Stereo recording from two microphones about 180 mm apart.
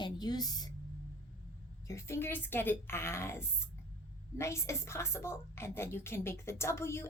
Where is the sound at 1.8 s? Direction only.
15° left (ahead or behind).